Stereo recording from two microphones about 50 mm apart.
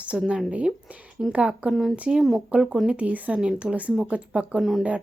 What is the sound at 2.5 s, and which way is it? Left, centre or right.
Speech, centre.